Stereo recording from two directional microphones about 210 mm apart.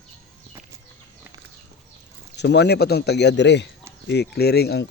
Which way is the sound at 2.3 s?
55° left (ahead or behind).